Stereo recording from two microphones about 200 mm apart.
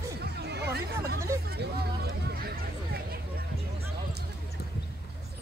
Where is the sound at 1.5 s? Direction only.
50° right (ahead or behind).